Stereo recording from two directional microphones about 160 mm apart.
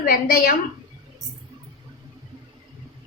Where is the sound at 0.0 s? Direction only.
65° left (ahead or behind).